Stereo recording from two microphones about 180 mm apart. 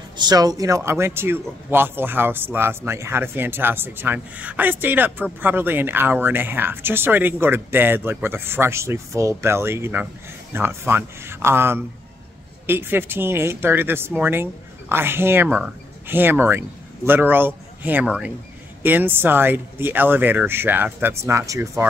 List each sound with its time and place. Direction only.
0.2 s speech: 20° right (ahead or behind)